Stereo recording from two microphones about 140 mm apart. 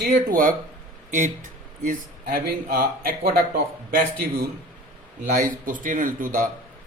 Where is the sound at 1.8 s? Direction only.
80° right.